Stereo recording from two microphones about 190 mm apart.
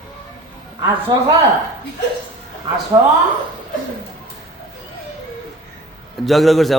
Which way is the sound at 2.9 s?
15° right (ahead or behind).